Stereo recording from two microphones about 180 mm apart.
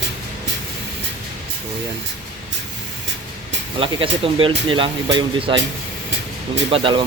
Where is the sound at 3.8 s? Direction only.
30° right (ahead or behind).